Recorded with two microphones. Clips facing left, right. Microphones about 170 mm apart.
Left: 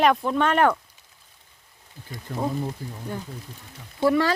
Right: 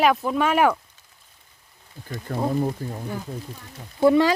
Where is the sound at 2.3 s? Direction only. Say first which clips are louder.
Right 4 dB; 50° right (ahead or behind).